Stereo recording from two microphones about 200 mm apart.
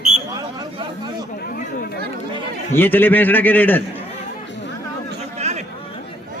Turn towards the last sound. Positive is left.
turn(degrees=-35)  # may be behind; listen again after turning